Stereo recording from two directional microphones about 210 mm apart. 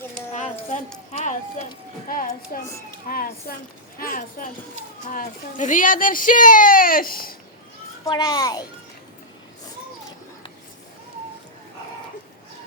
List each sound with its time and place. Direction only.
0.1 s a sound: 35° left (ahead or behind)
1.1 s speech: 35° left (ahead or behind)
8.0 s a child's voice: 20° left (ahead or behind)